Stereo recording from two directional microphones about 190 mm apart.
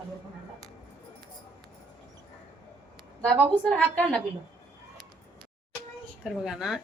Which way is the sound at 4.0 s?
5° left (ahead or behind).